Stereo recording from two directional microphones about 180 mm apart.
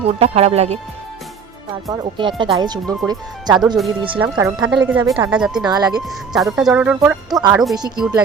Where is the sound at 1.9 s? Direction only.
25° right (ahead or behind).